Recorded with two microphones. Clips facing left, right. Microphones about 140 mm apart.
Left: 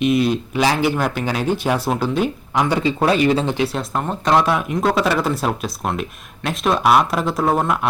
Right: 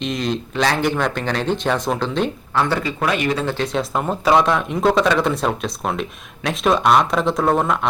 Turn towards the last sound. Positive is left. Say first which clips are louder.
# right 1 dB
turn(degrees=5)  # may be behind; listen again after turning